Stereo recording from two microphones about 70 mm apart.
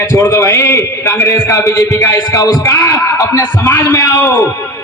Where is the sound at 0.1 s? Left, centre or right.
Left.